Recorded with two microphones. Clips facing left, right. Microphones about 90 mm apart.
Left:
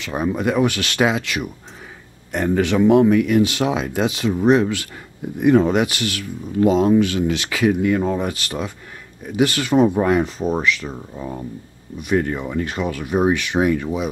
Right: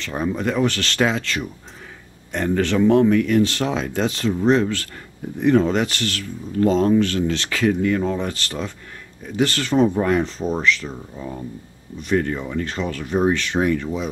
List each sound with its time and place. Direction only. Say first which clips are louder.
0.0 s speech: left 2 dB; 10° left (ahead or behind)